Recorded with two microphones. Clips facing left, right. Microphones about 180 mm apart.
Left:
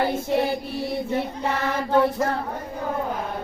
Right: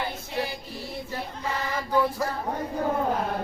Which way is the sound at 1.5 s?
65° left (ahead or behind).